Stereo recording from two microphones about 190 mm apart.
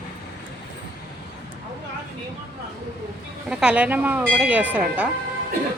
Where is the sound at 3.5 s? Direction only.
5° right (ahead or behind).